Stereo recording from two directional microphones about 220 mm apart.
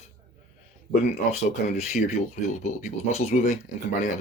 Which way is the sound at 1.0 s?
30° left (ahead or behind).